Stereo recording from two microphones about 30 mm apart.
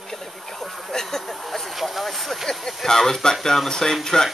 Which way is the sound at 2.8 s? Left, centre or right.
Centre.